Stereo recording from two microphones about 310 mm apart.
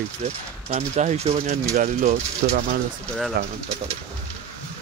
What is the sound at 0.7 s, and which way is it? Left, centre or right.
Speech, right.